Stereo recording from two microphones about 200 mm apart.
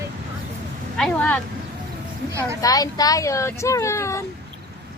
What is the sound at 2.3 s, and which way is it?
Speech, 15° right (ahead or behind).